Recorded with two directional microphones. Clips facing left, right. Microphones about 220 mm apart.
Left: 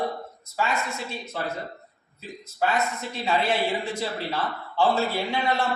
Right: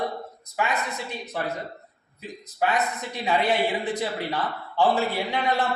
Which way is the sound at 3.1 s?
15° right (ahead or behind).